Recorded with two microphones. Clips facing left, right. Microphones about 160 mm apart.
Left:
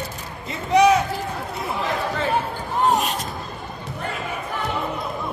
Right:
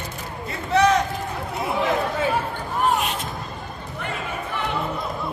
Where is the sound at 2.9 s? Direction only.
40° left (ahead or behind).